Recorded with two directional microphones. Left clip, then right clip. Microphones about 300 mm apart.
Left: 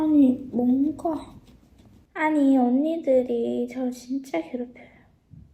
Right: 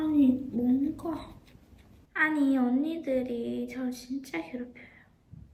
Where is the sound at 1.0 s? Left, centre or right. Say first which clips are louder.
Left 8 dB; centre.